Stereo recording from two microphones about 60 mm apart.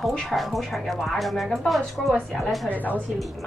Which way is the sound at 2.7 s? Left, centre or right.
Left.